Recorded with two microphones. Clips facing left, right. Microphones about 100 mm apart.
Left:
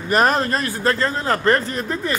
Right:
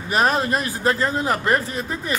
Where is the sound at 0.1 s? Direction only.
5° right (ahead or behind).